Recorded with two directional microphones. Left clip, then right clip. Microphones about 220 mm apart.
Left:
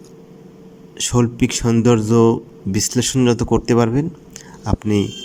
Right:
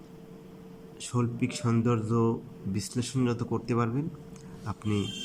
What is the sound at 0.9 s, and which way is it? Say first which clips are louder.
A man's voice: left 14 dB; 30° left (ahead or behind).